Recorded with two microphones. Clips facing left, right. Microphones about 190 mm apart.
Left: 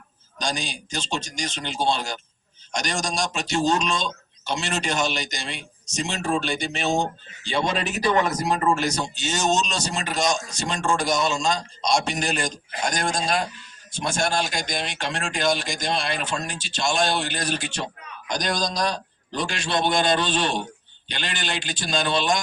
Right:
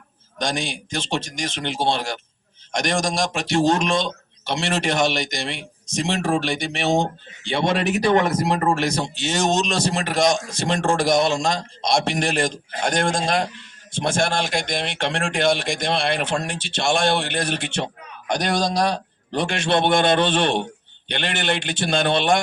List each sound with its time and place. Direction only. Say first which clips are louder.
0.3 s speech: right 4 dB; 55° right (ahead or behind)